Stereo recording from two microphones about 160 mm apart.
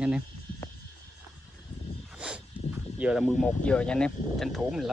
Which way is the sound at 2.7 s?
10° right (ahead or behind).